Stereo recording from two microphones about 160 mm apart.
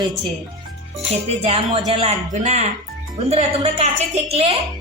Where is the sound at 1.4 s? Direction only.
40° right (ahead or behind).